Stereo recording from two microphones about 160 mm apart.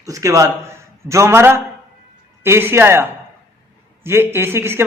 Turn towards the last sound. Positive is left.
turn(degrees=-15)  # may be behind; listen again after turning